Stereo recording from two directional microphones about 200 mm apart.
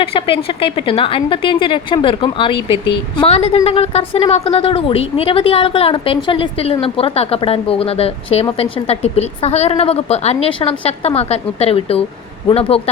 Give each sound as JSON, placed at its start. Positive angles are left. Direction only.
{"t": 0.0, "sound": "a woman's voice", "side_deg": 25}